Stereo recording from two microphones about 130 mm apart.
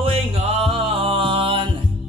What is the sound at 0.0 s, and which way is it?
Music, 50° right (ahead or behind).